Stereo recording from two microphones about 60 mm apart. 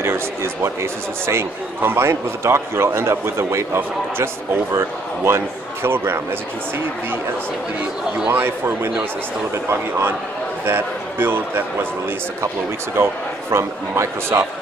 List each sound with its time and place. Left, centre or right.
0.0 s a man's voice: right
8.3 s speech: right
10.6 s speech: right
12.9 s a man's voice: right